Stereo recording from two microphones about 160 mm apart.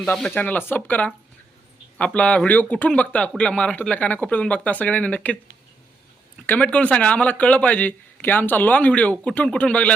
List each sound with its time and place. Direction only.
0.0 s speech: 5° left (ahead or behind)
6.4 s speech: 10° left (ahead or behind)